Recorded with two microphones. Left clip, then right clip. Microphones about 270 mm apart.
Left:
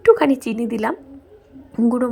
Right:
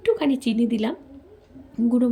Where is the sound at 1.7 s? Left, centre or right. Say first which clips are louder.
Left 3 dB; left.